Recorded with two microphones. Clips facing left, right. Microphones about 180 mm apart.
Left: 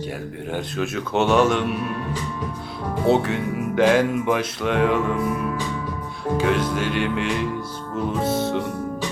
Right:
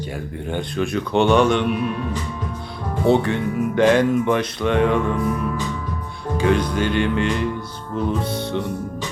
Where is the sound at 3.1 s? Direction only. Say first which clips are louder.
Right 2 dB; 5° left (ahead or behind).